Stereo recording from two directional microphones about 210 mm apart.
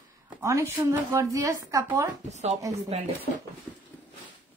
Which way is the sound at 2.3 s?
35° right (ahead or behind).